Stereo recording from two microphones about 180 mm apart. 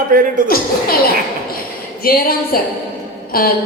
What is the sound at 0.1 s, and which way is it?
Speech, 50° right (ahead or behind).